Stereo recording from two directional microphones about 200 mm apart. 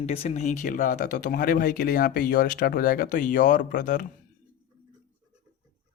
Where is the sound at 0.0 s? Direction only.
30° left (ahead or behind).